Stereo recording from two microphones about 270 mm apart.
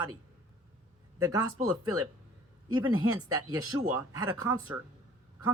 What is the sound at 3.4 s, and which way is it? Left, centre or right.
Speech, centre.